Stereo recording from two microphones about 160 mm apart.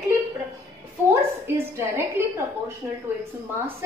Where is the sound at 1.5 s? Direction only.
15° right (ahead or behind).